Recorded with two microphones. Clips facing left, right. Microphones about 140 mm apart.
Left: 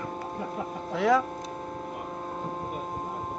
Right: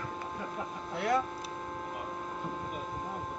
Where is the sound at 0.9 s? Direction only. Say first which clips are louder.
Left 7 dB; 90° left.